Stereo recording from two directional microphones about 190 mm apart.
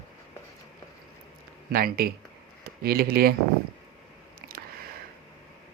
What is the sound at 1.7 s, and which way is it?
Speech, 50° right (ahead or behind).